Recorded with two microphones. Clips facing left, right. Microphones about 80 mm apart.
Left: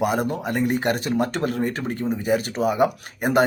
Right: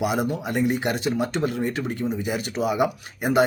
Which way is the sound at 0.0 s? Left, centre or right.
Left.